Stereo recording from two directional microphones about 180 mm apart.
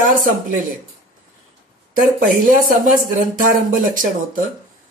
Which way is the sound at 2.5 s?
50° right (ahead or behind).